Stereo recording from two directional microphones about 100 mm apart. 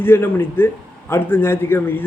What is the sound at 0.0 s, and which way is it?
A man's voice, 20° left (ahead or behind).